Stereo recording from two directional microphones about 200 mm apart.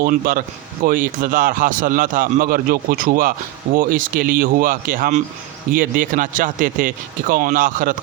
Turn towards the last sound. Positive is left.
turn(degrees=-45)  # may be behind; listen again after turning